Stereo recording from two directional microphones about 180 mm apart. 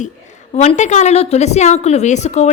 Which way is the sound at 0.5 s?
40° left (ahead or behind).